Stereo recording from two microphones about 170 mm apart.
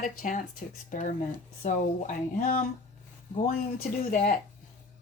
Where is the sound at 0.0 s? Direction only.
50° left (ahead or behind).